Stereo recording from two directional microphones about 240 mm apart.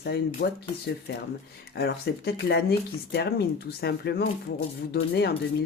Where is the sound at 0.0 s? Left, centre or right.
Left.